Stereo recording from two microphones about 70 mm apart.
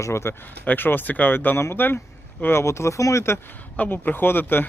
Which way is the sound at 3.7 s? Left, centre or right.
Left.